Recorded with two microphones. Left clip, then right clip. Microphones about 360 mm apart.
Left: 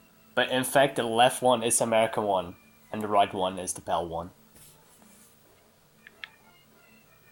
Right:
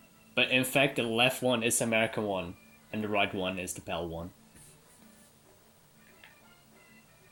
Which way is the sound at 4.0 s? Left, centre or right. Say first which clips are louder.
Left 6 dB; left.